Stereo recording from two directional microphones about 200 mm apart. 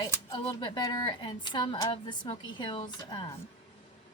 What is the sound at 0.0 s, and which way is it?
A woman's voice, 20° left (ahead or behind).